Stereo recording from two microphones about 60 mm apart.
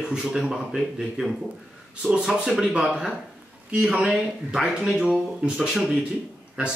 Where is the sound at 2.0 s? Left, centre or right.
Centre.